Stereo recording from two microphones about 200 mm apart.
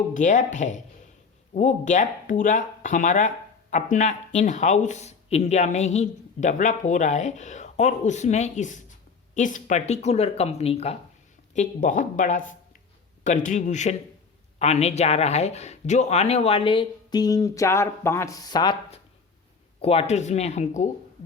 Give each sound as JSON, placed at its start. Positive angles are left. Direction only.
{"t": 0.1, "sound": "speech", "side_deg": 40}